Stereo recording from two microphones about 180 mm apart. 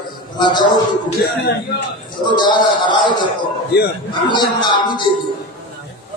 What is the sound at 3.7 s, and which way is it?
Speech, 60° left (ahead or behind).